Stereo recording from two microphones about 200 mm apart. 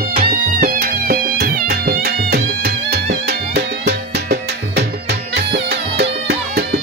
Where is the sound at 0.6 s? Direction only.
50° right (ahead or behind).